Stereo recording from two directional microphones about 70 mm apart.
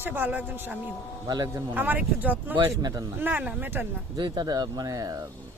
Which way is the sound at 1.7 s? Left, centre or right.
Right.